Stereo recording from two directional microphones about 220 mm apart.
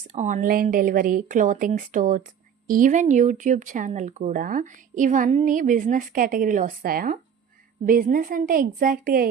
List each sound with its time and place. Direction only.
0.1 s speech: 35° right (ahead or behind)